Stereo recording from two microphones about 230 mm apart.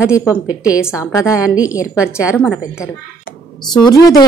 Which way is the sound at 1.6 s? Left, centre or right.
Centre.